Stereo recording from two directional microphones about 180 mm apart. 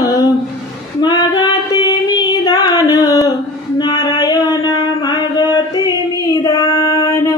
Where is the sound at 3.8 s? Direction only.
20° left (ahead or behind).